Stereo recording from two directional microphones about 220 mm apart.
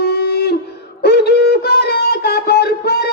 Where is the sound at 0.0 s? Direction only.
45° left (ahead or behind).